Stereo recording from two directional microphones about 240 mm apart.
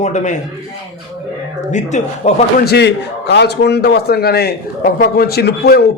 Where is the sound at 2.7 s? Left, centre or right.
Left.